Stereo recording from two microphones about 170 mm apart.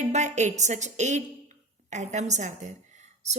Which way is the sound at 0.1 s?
45° right (ahead or behind).